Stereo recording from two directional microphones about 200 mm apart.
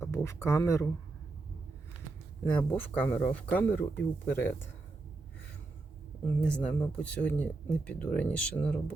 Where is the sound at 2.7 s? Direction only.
10° left (ahead or behind).